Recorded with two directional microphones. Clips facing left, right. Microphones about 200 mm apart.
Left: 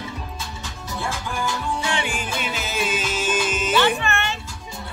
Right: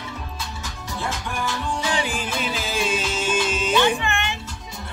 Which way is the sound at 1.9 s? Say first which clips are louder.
Right 1 dB; 35° right (ahead or behind).